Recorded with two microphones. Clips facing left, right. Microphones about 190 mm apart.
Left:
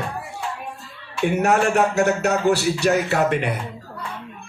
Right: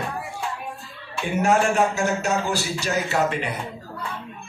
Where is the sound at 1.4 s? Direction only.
65° left (ahead or behind).